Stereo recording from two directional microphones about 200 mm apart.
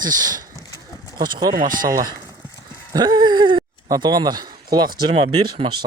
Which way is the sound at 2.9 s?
20° right (ahead or behind).